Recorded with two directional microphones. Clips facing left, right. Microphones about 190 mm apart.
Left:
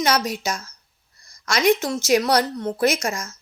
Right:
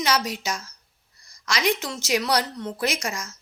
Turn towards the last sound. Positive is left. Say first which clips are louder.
# left 6 dB
turn(degrees=45)  # may be behind; listen again after turning